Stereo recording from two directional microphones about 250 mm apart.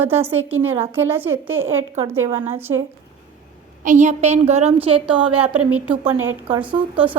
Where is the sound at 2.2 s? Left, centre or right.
Right.